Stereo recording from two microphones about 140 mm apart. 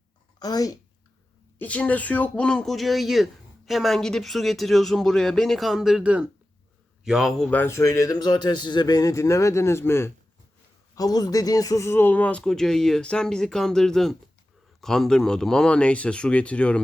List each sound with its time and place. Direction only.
0.3 s speech: 25° left (ahead or behind)
1.5 s a man's voice: 10° left (ahead or behind)